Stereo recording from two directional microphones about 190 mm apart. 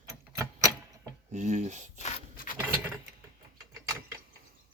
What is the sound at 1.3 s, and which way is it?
Speech, 40° right (ahead or behind).